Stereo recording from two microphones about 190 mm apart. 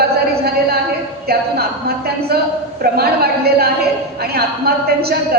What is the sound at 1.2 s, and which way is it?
A woman's voice, 55° right (ahead or behind).